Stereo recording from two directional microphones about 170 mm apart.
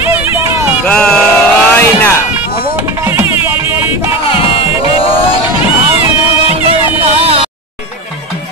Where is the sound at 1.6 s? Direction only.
10° left (ahead or behind).